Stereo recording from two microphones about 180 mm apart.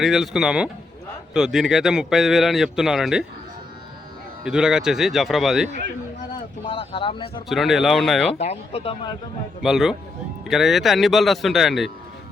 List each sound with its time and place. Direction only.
0.0 s a man's voice: centre (ahead or behind)
4.4 s a man's voice: 5° right (ahead or behind)
6.7 s speech: 30° left (ahead or behind)
7.4 s a man's voice: centre (ahead or behind)
8.4 s speech: 35° left (ahead or behind)
9.6 s a man's voice: centre (ahead or behind)